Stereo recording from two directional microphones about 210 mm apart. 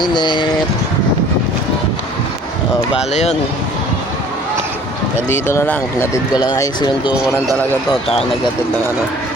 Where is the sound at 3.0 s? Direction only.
30° left (ahead or behind).